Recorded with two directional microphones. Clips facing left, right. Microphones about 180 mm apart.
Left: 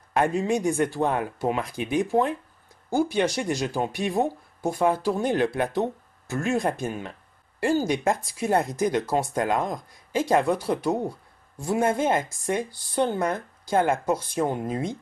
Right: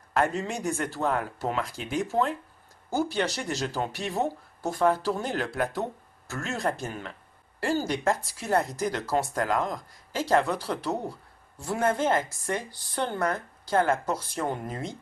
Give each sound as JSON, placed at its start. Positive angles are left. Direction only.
{"t": 0.1, "sound": "speech", "side_deg": 10}